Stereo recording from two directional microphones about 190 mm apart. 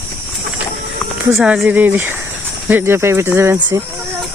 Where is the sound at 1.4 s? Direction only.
5° right (ahead or behind).